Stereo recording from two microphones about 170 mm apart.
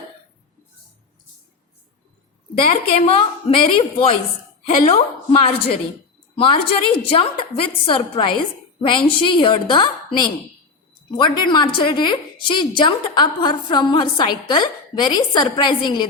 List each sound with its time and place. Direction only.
2.6 s a woman's voice: 35° left (ahead or behind)